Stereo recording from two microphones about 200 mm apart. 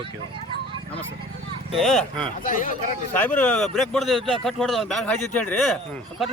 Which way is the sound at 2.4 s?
40° left (ahead or behind).